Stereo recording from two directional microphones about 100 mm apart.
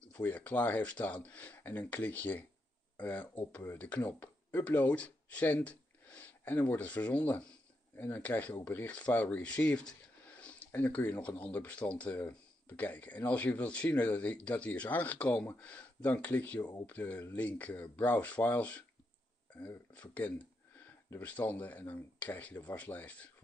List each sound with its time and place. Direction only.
0.1 s speech: 15° left (ahead or behind)
19.9 s speech: 15° left (ahead or behind)